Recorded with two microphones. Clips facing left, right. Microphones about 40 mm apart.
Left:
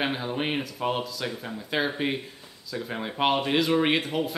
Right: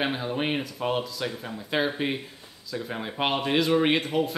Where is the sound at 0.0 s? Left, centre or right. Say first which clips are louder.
Right 1 dB; centre.